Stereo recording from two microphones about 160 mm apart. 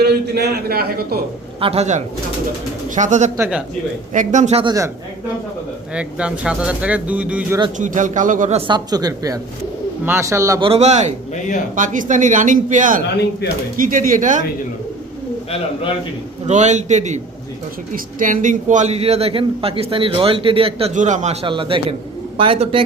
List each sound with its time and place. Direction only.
0.0 s a man's voice: 90° right; by 1.2 s 70° right (ahead or behind)
1.6 s speech: 40° right (ahead or behind)
4.6 s speech: 20° right (ahead or behind)
5.9 s speech: 5° right (ahead or behind)
7.8 s speech: 50° right (ahead or behind)
8.5 s speech: 30° right (ahead or behind)
10.6 s speech: 40° right (ahead or behind)
16.5 s a man's voice: 45° right (ahead or behind)
20.9 s speech: 50° right (ahead or behind)
21.4 s a man's voice: 30° right (ahead or behind)